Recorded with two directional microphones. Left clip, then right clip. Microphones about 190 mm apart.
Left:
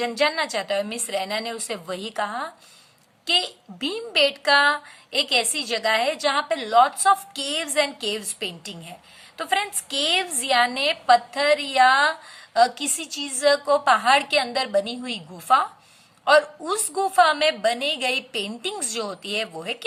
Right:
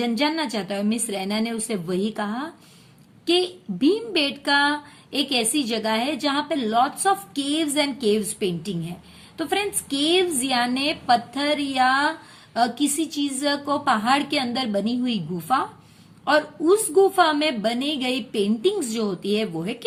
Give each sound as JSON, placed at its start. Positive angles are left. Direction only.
{"t": 0.0, "sound": "a woman's voice", "side_deg": 25}